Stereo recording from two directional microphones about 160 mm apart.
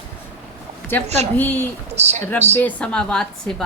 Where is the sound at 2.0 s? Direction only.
45° right (ahead or behind).